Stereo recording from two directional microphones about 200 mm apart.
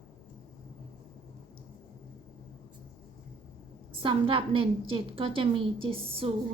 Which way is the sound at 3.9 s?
25° right (ahead or behind).